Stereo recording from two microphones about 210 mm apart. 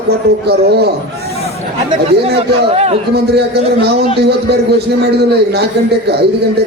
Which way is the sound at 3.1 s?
50° right (ahead or behind).